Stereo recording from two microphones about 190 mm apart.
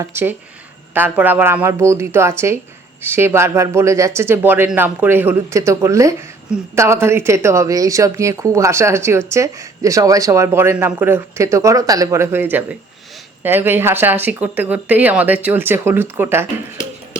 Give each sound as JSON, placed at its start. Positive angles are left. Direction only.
{"t": 0.0, "sound": "a woman's voice", "side_deg": -10}